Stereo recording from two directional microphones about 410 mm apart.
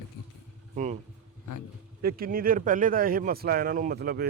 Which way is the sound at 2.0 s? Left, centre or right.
Right.